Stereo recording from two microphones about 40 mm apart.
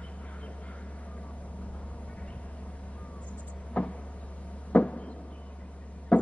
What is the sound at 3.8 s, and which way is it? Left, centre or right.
Vehicle, left.